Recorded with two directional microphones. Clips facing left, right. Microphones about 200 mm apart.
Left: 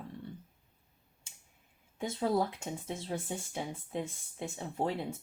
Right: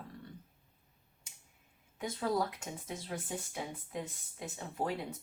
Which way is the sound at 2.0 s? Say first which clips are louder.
Left 3 dB; 25° left (ahead or behind).